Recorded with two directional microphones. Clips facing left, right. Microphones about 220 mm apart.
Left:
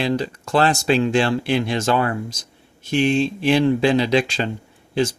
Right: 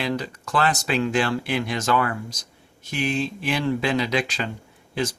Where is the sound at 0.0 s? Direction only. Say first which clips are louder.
Left 5 dB; 25° left (ahead or behind).